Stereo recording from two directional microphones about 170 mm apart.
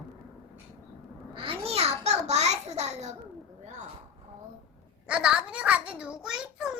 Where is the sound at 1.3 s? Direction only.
30° right (ahead or behind).